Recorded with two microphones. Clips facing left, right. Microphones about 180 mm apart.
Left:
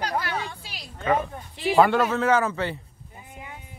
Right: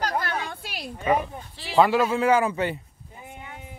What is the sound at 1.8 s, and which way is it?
Speech, 5° right (ahead or behind).